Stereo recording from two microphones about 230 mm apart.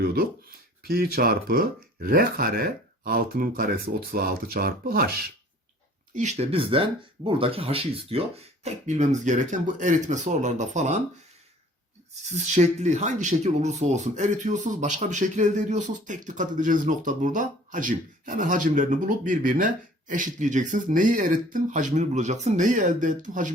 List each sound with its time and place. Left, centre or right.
0.0 s speech: right
6.1 s speech: right
12.2 s speech: right